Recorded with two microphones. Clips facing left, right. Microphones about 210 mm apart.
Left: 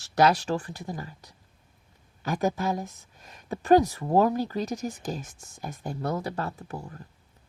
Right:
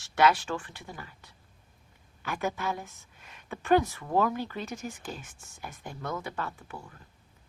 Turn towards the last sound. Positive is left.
turn(degrees=40)  # may be behind; listen again after turning